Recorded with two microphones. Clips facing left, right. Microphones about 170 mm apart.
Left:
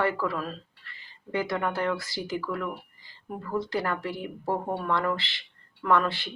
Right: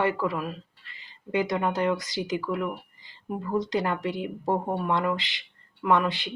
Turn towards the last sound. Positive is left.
turn(degrees=-15)  # may be behind; listen again after turning